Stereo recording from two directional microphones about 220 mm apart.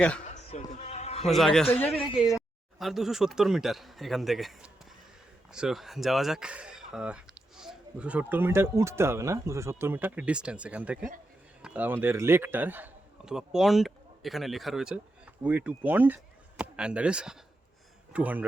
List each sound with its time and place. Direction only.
0.3 s bleat: 30° left (ahead or behind)
1.2 s speech: centre (ahead or behind)
2.0 s speech: 15° left (ahead or behind)
2.7 s a man's voice: centre (ahead or behind)